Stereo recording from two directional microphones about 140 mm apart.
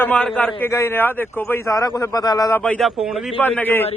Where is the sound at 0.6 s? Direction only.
20° left (ahead or behind).